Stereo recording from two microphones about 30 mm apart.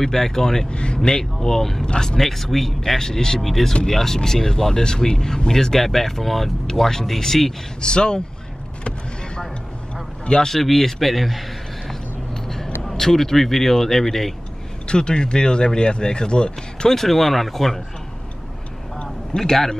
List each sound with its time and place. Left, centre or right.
0.0 s speech: centre
0.7 s speech: left
1.0 s speech: centre
3.0 s speech: left
3.3 s speech: centre
7.8 s speech: left
10.3 s speech: left
10.6 s a man's voice: centre
12.9 s speech: centre
14.9 s speech: left
16.9 s speech: centre
19.3 s speech: centre